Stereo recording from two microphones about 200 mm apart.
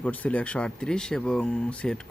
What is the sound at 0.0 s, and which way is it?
Speech, 5° left (ahead or behind).